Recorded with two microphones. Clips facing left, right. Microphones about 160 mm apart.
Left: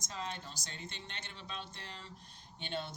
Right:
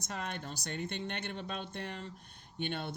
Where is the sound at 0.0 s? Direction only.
60° right (ahead or behind).